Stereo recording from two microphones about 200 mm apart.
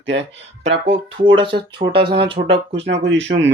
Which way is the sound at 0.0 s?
60° right (ahead or behind).